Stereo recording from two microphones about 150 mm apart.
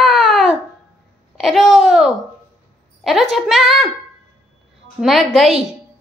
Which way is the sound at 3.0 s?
Centre (ahead or behind).